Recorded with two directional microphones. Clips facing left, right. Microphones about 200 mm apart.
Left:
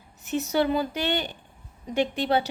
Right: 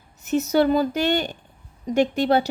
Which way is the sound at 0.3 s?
45° right (ahead or behind).